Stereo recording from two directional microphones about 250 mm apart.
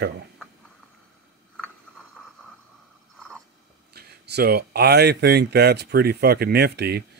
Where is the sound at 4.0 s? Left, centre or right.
Right.